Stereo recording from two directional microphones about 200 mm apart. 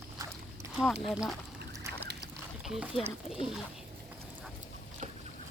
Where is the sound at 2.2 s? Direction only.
Centre (ahead or behind).